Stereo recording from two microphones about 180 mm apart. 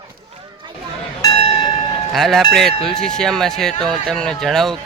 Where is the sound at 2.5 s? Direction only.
Centre (ahead or behind).